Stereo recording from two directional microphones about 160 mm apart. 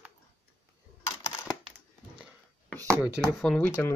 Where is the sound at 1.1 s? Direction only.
20° left (ahead or behind).